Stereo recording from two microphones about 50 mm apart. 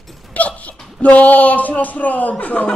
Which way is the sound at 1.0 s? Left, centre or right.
Left.